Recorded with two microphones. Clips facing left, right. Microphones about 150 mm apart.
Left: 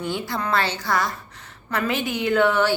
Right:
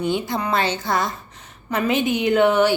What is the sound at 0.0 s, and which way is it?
A woman's voice, 20° right (ahead or behind).